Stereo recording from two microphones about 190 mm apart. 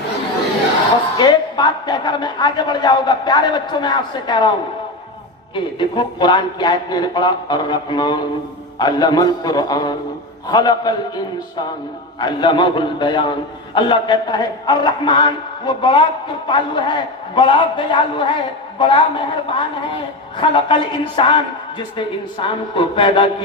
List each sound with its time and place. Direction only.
1.2 s a man's voice: 20° left (ahead or behind)
5.5 s a man's voice: 25° left (ahead or behind)
12.2 s a man's voice: 25° left (ahead or behind)
20.4 s a man's voice: 25° left (ahead or behind)